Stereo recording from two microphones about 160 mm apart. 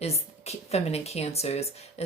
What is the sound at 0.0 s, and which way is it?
Speech, 40° left (ahead or behind).